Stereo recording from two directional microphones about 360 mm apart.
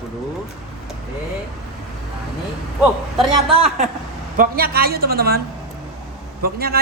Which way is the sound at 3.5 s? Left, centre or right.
Centre.